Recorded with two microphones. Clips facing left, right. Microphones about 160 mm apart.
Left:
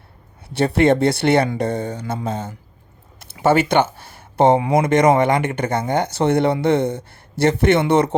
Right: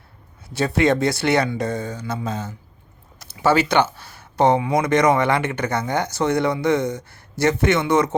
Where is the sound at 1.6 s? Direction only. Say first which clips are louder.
Left 3 dB; 30° left (ahead or behind).